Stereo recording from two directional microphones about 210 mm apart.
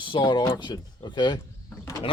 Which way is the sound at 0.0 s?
20° left (ahead or behind).